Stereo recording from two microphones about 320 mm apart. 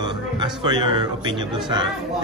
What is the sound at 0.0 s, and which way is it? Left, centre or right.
Speech, centre.